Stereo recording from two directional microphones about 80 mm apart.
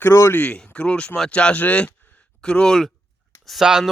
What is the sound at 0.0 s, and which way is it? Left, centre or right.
Speech, left.